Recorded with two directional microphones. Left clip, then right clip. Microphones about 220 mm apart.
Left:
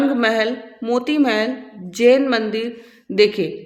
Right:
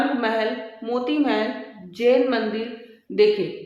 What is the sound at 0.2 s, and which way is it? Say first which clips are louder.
A woman's voice: left 5 dB; 40° left (ahead or behind).